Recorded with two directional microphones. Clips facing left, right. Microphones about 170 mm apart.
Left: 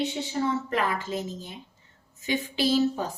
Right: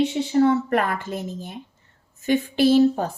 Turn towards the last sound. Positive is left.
turn(degrees=-55)  # may be behind; listen again after turning